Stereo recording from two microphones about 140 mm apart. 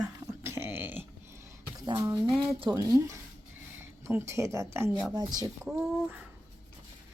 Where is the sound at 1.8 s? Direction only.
30° right (ahead or behind).